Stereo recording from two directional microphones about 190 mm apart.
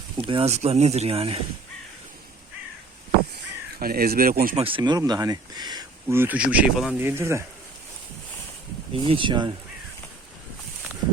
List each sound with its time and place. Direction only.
0.2 s speech: 30° right (ahead or behind)
3.3 s speech: 50° right (ahead or behind)
4.5 s speech: 30° right (ahead or behind)
8.9 s speech: 30° right (ahead or behind)